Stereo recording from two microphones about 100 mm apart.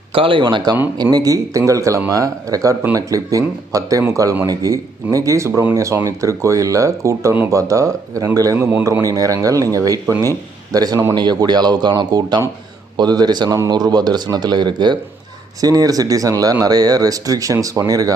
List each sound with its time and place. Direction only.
0.1 s speech: 60° right (ahead or behind); by 8.5 s 35° right (ahead or behind)
8.5 s a man's voice: 20° right (ahead or behind)
8.8 s speech: 30° right (ahead or behind)